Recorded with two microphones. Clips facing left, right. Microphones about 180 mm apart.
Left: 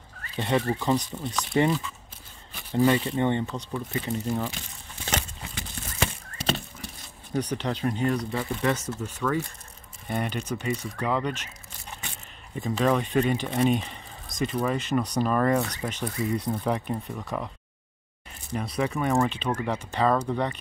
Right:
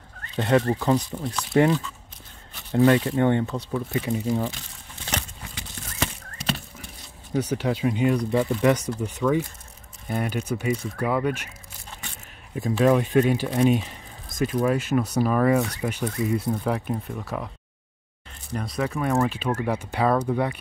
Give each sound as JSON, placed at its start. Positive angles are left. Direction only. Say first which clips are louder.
{"t": 0.4, "sound": "speech", "louder": "right 4 dB", "side_deg": 0}
{"t": 6.3, "sound": "horse", "louder": "left 1 dB", "side_deg": 30}
{"t": 7.3, "sound": "speech", "louder": "right 4 dB", "side_deg": -5}
{"t": 12.5, "sound": "speech", "louder": "right 4 dB", "side_deg": -5}
{"t": 18.5, "sound": "speech", "louder": "even", "side_deg": 0}